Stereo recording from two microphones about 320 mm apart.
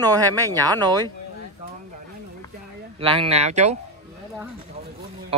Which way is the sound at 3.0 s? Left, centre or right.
Centre.